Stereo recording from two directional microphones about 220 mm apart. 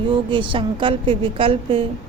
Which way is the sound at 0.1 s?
25° right (ahead or behind).